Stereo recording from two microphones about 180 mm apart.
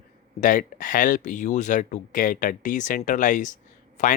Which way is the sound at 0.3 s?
45° left (ahead or behind).